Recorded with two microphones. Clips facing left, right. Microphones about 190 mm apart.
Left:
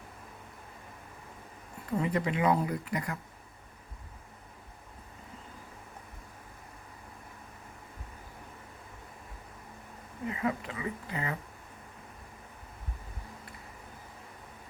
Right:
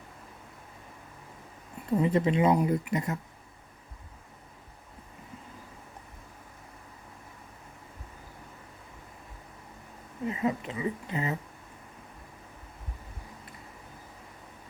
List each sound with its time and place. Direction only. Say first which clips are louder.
2.0 s speech: right 5 dB; 25° right (ahead or behind)
10.2 s speech: right 3 dB; 20° right (ahead or behind)